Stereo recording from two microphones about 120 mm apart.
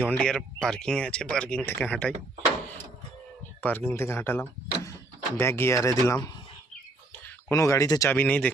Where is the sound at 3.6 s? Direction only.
15° left (ahead or behind).